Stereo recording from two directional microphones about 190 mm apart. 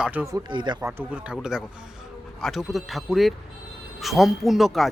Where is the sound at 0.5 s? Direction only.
25° right (ahead or behind).